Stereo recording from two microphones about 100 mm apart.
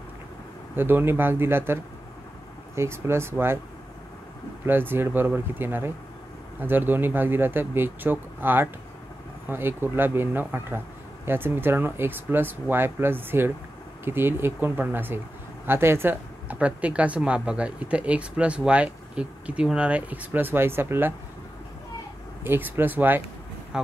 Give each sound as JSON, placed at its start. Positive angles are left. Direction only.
{"t": 0.7, "sound": "speech", "side_deg": -20}
{"t": 4.6, "sound": "speech", "side_deg": -20}
{"t": 22.4, "sound": "speech", "side_deg": -20}